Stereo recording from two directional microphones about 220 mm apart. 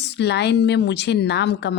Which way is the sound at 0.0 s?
50° left (ahead or behind).